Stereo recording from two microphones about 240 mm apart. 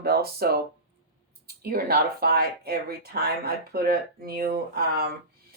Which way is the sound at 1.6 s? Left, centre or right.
Right.